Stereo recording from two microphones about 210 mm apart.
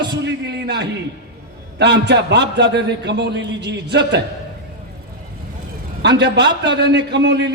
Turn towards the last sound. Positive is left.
turn(degrees=-55)  # may be behind; listen again after turning